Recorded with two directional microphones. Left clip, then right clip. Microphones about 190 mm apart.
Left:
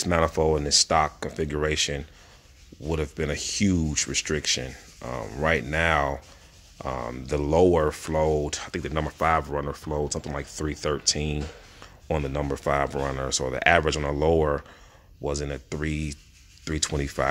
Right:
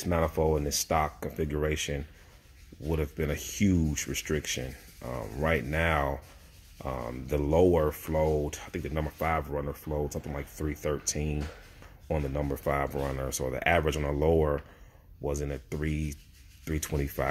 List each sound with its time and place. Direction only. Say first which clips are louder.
0.0 s speech: left 5 dB; 15° left (ahead or behind)